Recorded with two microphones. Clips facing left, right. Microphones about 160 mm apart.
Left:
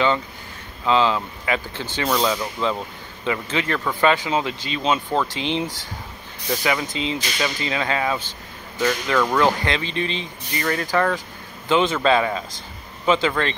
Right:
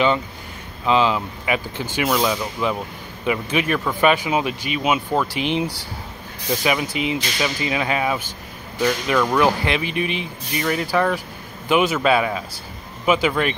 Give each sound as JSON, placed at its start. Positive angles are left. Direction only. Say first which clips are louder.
{"t": 0.8, "sound": "speech", "louder": "right 1 dB", "side_deg": -15}